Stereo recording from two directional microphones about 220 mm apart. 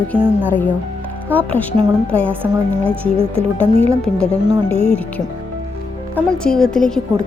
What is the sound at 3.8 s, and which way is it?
Speech, 5° left (ahead or behind).